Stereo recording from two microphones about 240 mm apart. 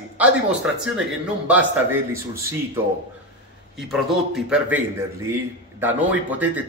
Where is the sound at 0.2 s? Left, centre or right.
Centre.